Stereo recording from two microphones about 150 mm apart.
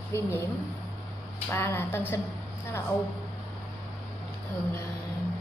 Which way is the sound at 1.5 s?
15° left (ahead or behind).